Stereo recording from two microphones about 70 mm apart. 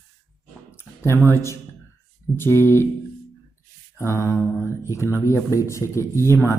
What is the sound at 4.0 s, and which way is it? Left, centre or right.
Speech, left.